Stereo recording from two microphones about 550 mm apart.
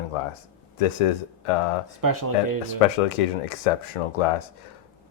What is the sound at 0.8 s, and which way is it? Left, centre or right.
Speech, left.